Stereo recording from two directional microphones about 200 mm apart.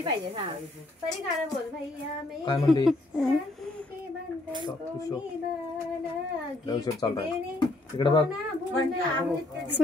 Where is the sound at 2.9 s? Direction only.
Centre (ahead or behind).